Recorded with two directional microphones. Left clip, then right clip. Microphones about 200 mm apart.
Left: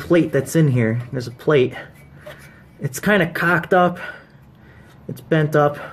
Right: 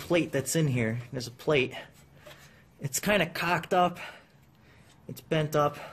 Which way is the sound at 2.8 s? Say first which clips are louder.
Left 9 dB; 20° right (ahead or behind).